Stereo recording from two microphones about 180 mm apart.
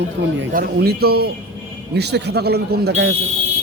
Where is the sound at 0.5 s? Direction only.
60° right (ahead or behind).